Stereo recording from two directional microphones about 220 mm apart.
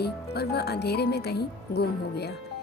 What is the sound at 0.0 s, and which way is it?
Speech, 45° left (ahead or behind).